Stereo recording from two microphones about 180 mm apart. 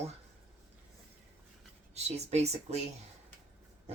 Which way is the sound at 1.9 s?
35° right (ahead or behind).